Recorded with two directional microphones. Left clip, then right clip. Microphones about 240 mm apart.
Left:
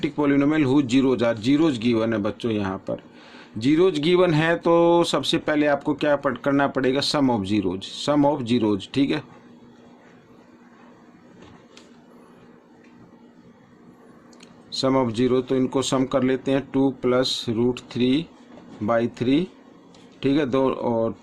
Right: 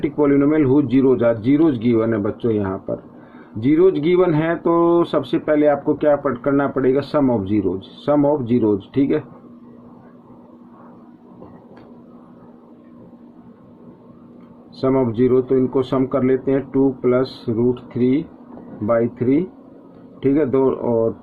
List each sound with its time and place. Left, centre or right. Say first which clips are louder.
0.0 s speech: right 5 dB; left
14.7 s speech: right 3 dB; left